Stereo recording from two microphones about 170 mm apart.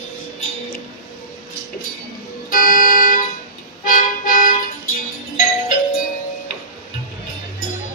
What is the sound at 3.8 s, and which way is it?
Music, 55° left (ahead or behind).